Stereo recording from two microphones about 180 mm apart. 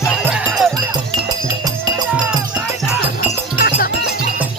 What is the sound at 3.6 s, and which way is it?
Music, 55° left (ahead or behind).